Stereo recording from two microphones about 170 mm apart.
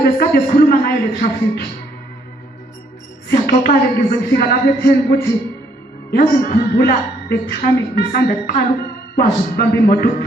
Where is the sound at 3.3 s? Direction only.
60° left (ahead or behind).